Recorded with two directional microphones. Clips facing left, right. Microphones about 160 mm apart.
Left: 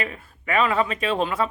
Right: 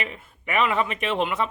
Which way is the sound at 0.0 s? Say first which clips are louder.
Left 2 dB; 20° right (ahead or behind).